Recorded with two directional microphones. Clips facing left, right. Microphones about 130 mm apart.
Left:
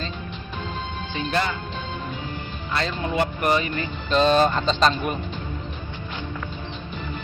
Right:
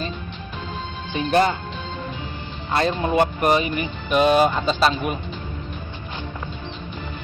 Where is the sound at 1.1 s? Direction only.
20° right (ahead or behind).